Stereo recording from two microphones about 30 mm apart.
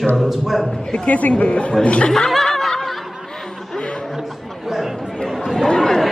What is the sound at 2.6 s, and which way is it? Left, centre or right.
Snicker, centre.